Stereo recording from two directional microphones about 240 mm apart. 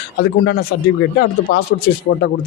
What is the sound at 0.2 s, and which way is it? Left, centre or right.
Speech, left.